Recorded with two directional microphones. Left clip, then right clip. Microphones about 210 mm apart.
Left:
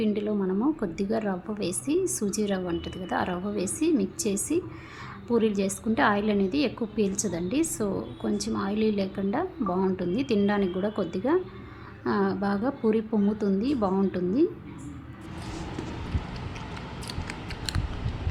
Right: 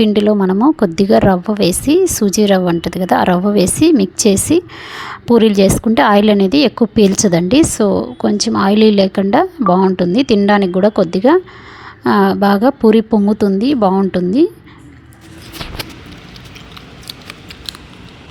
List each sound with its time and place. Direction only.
0.0 s a woman's voice: 45° right (ahead or behind)
17.1 s scissors: 20° left (ahead or behind)